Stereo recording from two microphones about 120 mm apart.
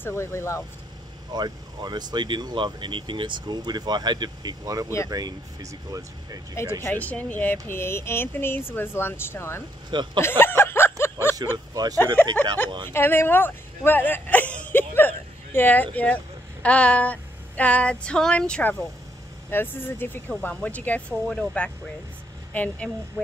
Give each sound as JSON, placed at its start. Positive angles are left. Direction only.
{"t": 0.0, "sound": "speech", "side_deg": 20}
{"t": 1.3, "sound": "speech", "side_deg": -35}
{"t": 6.5, "sound": "speech", "side_deg": 20}
{"t": 9.8, "sound": "speech", "side_deg": -40}
{"t": 10.2, "sound": "a sound", "side_deg": 20}
{"t": 11.5, "sound": "speech", "side_deg": -35}
{"t": 12.9, "sound": "speech", "side_deg": 20}